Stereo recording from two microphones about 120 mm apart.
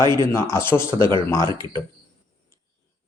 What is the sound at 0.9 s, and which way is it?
Speech, 40° right (ahead or behind).